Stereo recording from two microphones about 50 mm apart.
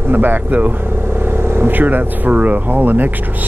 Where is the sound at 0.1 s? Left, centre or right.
Right.